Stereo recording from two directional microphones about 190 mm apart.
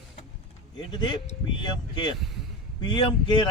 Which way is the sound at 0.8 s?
25° left (ahead or behind).